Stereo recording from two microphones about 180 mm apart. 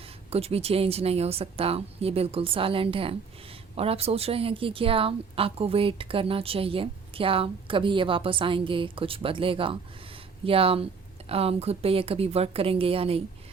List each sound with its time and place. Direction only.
0.0 s a woman's voice: 35° right (ahead or behind)